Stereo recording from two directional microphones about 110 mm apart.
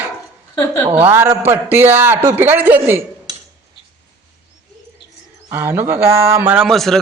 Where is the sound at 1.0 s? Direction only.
20° right (ahead or behind).